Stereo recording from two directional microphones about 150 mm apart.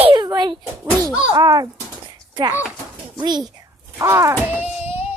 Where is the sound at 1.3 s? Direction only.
25° right (ahead or behind).